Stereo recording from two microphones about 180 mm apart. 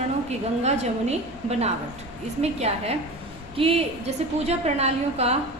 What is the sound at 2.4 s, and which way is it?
A woman's voice, 35° right (ahead or behind).